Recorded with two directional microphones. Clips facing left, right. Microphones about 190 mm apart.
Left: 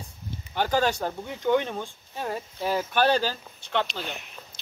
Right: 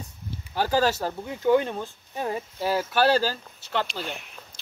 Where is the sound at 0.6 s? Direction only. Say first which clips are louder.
Right 1 dB; 5° right (ahead or behind).